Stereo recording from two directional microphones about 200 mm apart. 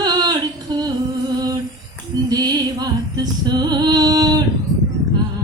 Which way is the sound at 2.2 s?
20° right (ahead or behind).